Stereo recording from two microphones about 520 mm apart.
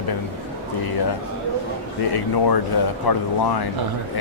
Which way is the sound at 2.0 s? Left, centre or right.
Left.